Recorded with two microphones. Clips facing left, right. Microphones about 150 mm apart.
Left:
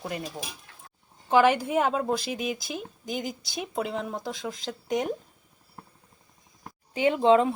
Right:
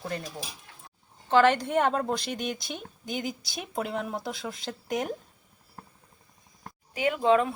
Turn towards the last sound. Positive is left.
turn(degrees=20)  # may be behind; listen again after turning